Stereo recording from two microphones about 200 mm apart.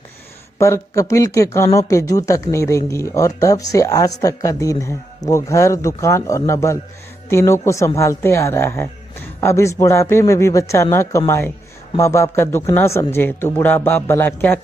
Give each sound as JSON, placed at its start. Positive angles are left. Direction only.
{"t": 0.6, "sound": "a woman's voice", "side_deg": 15}